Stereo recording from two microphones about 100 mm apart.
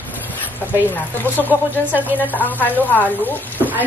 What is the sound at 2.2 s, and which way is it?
Speech, 15° left (ahead or behind).